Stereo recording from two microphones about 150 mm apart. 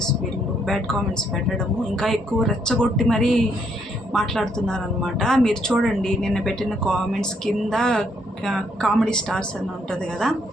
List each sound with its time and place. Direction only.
0.6 s a woman's voice: 5° left (ahead or behind)